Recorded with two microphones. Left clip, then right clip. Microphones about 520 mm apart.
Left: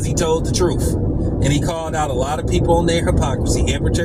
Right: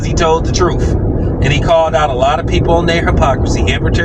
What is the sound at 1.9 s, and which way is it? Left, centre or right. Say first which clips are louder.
Speech: right 9 dB; left.